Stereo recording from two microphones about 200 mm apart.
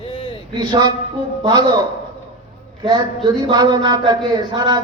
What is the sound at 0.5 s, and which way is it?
A man's voice, 20° right (ahead or behind).